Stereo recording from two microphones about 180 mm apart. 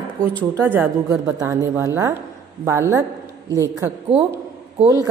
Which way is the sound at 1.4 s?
20° right (ahead or behind).